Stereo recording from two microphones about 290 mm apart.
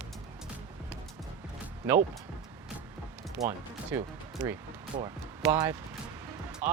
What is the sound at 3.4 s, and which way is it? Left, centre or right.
Speech, centre.